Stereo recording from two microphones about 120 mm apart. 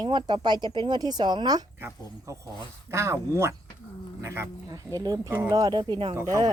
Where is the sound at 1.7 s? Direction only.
15° right (ahead or behind).